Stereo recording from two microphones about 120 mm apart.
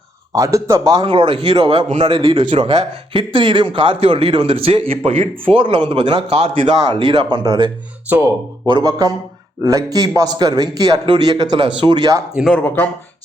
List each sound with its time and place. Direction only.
0.3 s a man's voice: 25° right (ahead or behind)
1.0 s speech: 45° right (ahead or behind)
5.5 s a man's voice: 40° right (ahead or behind)
12.3 s speech: 5° right (ahead or behind)
12.6 s speech: 15° left (ahead or behind)